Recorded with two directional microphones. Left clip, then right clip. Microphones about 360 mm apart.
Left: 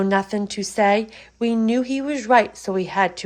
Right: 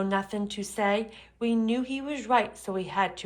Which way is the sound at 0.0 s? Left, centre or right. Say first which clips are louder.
Left 8 dB; centre.